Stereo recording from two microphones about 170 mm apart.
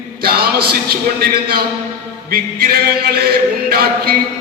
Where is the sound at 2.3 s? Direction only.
65° right (ahead or behind).